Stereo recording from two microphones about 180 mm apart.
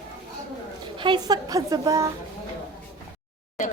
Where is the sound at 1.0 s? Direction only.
25° right (ahead or behind).